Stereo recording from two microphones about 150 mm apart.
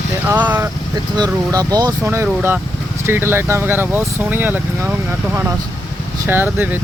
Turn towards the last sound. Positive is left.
turn(degrees=-15)  # may be behind; listen again after turning